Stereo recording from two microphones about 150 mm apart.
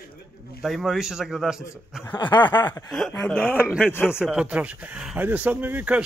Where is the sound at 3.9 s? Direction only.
15° left (ahead or behind).